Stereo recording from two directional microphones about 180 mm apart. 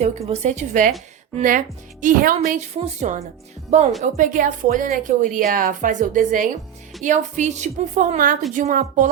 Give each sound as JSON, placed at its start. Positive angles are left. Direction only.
{"t": 0.0, "sound": "a woman's voice", "side_deg": -35}